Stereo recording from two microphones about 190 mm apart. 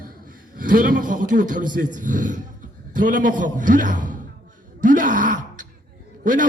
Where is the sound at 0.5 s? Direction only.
45° right (ahead or behind).